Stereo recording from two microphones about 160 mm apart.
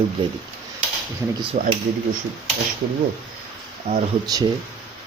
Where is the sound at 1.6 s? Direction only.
50° right (ahead or behind).